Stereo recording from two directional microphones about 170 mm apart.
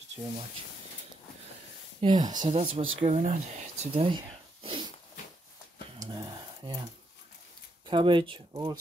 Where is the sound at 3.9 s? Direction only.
30° right (ahead or behind).